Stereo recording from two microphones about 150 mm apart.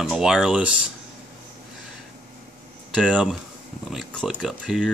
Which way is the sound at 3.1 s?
5° right (ahead or behind).